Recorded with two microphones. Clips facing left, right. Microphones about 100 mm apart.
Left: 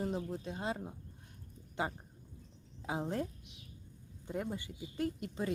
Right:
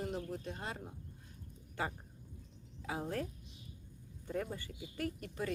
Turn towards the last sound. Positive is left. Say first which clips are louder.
# left 3 dB
turn(degrees=20)  # may be behind; listen again after turning